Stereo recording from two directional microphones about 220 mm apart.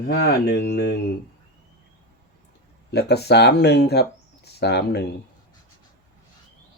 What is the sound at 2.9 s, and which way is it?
Speech, 50° left (ahead or behind).